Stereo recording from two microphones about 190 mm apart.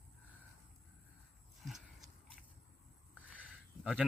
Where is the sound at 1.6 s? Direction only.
Centre (ahead or behind).